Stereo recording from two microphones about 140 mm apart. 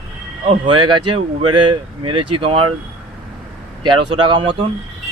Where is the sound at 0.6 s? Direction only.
35° right (ahead or behind).